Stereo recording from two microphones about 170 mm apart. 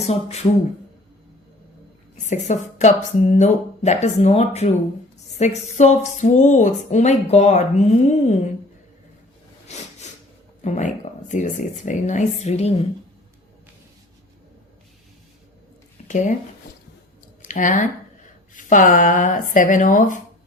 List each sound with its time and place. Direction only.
0.0 s speech: 40° left (ahead or behind)
2.2 s speech: 45° left (ahead or behind)
9.6 s a sound: 40° left (ahead or behind)
10.6 s speech: 45° left (ahead or behind)
16.0 s speech: 45° left (ahead or behind)
17.5 s speech: 50° left (ahead or behind)